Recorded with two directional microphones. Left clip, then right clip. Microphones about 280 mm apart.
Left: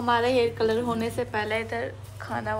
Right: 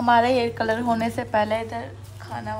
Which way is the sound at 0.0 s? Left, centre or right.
Right.